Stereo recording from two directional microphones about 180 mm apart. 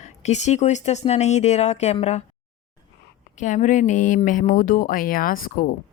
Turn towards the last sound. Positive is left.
turn(degrees=50)  # may be behind; listen again after turning